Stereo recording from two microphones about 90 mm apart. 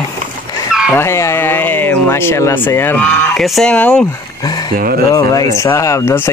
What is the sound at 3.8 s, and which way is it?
Speech, 20° left (ahead or behind).